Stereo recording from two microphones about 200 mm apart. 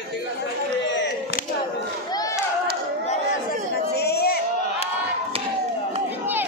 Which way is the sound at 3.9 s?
55° left (ahead or behind).